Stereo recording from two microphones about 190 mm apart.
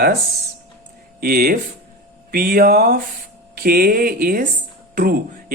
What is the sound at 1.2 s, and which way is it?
Speech, 50° right (ahead or behind).